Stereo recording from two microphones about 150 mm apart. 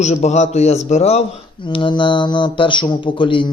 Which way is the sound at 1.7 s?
35° left (ahead or behind).